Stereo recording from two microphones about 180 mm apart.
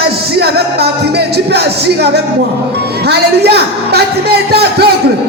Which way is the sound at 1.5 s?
65° right (ahead or behind).